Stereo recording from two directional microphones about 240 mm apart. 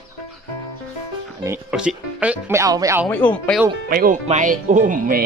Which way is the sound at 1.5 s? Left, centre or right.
Centre.